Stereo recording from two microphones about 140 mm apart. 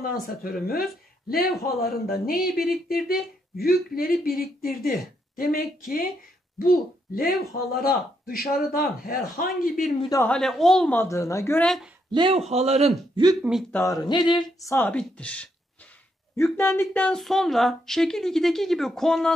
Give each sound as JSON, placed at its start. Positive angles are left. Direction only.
{"t": 0.0, "sound": "speech", "side_deg": 90}
{"t": 9.9, "sound": "a woman's voice", "side_deg": 30}
{"t": 10.2, "sound": "speech", "side_deg": 5}
{"t": 11.0, "sound": "a woman's voice", "side_deg": 20}
{"t": 11.6, "sound": "speech", "side_deg": 0}
{"t": 12.1, "sound": "speech", "side_deg": -35}
{"t": 12.4, "sound": "a man's voice", "side_deg": -50}
{"t": 13.1, "sound": "speech", "side_deg": -30}
{"t": 13.4, "sound": "speech", "side_deg": -5}
{"t": 13.7, "sound": "speech", "side_deg": 15}
{"t": 13.9, "sound": "speech", "side_deg": 30}
{"t": 14.9, "sound": "speech", "side_deg": 10}
{"t": 16.5, "sound": "speech", "side_deg": 15}